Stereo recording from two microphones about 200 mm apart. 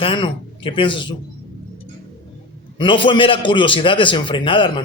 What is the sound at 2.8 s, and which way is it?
A man's voice, 25° left (ahead or behind).